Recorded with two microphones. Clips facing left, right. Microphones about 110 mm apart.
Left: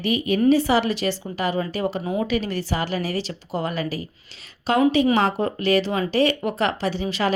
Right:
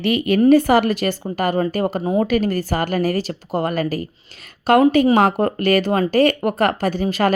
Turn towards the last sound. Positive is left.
turn(degrees=-50)  # may be behind; listen again after turning